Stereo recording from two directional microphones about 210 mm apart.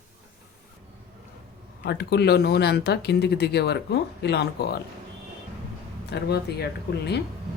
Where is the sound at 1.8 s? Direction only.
50° left (ahead or behind).